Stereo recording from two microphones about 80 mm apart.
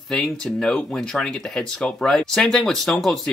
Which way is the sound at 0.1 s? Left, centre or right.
Centre.